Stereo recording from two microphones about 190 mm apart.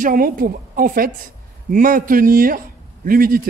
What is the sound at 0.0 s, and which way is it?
A woman's voice, 45° right (ahead or behind).